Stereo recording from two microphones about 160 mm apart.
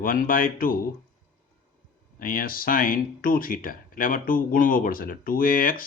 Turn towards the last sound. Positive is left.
turn(degrees=60)  # may be behind; listen again after turning